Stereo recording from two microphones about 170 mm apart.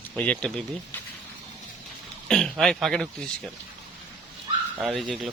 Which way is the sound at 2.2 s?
5° left (ahead or behind).